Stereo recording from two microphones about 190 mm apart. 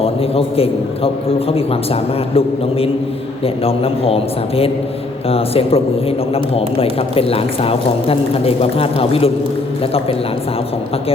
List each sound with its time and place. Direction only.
0.0 s a man's voice: 30° left (ahead or behind)